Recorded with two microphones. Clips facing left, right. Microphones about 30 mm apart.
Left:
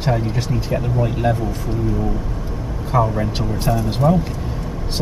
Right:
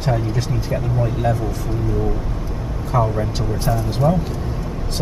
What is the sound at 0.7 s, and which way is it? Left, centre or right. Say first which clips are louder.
Speech: left 1 dB; left.